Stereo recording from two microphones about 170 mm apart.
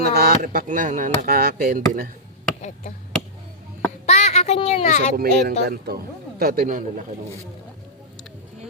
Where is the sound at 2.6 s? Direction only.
45° left (ahead or behind).